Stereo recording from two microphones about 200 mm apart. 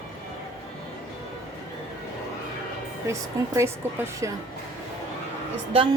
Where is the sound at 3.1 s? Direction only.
15° right (ahead or behind).